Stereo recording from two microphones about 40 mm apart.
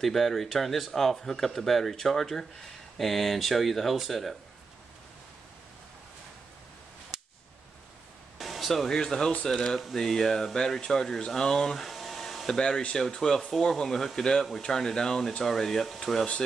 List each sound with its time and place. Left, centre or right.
0.0 s speech: centre
8.4 s a sound: centre
8.8 s speech: centre
9.7 s speech: centre
9.9 s speech: centre
11.7 s hair dryer: centre
12.5 s speech: centre